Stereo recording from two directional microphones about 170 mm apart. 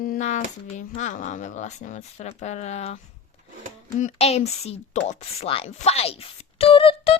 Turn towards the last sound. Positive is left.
turn(degrees=30)  # may be behind; listen again after turning